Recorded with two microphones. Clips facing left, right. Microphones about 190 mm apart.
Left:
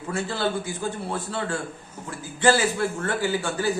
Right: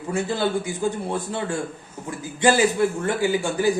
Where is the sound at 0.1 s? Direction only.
15° right (ahead or behind).